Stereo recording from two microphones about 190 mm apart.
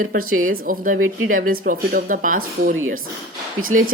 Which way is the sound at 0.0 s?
50° right (ahead or behind).